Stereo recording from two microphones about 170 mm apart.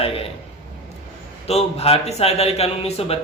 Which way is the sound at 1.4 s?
35° left (ahead or behind).